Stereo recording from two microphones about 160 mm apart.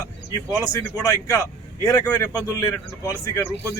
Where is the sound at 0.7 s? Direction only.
15° left (ahead or behind).